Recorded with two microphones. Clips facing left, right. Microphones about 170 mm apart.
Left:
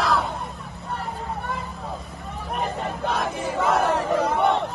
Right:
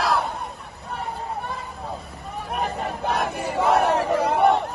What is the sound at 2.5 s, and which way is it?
Crowd, centre (ahead or behind).